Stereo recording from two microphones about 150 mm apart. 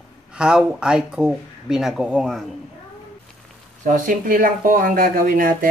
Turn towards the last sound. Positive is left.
turn(degrees=-70)  # may be behind; listen again after turning